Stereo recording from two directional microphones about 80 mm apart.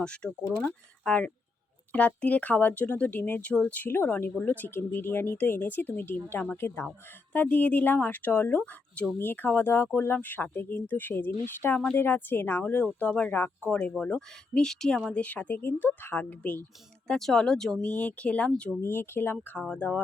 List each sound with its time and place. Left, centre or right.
0.0 s speech: centre; by 6.8 s left
7.3 s speech: centre
14.2 s speech: centre; by 16.6 s left
17.1 s speech: centre
17.8 s speech: centre
18.8 s speech: left